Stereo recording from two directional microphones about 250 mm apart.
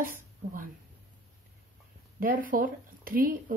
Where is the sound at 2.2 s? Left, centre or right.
Right.